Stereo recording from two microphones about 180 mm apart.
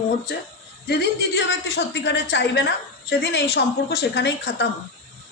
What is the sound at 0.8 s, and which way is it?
Speech, 65° left (ahead or behind).